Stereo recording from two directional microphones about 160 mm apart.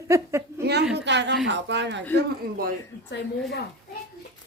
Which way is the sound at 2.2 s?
80° right.